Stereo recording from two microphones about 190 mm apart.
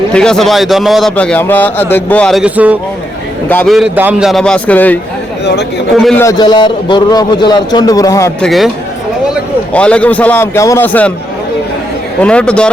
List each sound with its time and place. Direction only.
0.1 s a man's voice: 5° left (ahead or behind)
3.5 s a man's voice: 10° left (ahead or behind)
3.8 s a man's voice: 5° right (ahead or behind)
6.0 s a man's voice: centre (ahead or behind)
6.2 s a man's voice: 20° left (ahead or behind)
8.4 s a man's voice: centre (ahead or behind)
9.7 s a man's voice: 5° left (ahead or behind)
12.2 s a man's voice: 5° left (ahead or behind)